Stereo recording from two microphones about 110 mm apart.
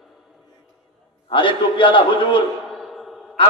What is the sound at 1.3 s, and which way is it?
A man's voice, 50° left (ahead or behind).